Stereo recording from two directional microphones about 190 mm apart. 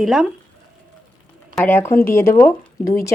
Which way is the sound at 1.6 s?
10° left (ahead or behind).